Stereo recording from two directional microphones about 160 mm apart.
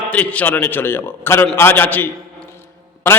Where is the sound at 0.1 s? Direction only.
10° left (ahead or behind).